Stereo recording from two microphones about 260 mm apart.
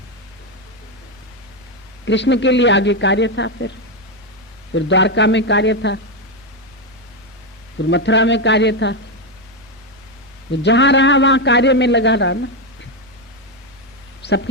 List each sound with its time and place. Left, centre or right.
2.0 s a man's voice: left
4.7 s a man's voice: left
7.9 s a man's voice: left
10.5 s a man's voice: left
14.2 s a sound: left